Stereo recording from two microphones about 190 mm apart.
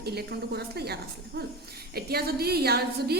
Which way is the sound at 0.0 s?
55° right (ahead or behind).